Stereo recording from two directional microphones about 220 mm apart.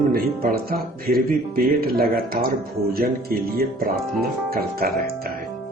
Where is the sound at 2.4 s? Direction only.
40° right (ahead or behind).